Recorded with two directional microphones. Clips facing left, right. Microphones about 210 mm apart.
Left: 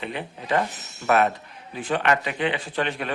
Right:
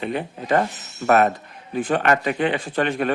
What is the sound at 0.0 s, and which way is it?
A man's voice, 45° right (ahead or behind).